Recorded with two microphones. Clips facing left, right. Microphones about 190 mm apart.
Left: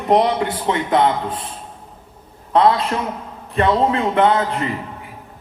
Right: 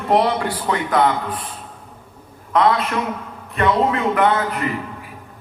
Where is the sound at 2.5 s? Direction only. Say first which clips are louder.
Left 2 dB; 30° left (ahead or behind).